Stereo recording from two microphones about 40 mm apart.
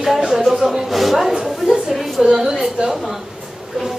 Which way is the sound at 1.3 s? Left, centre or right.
Centre.